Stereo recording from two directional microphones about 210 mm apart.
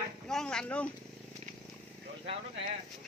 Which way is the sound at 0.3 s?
5° left (ahead or behind).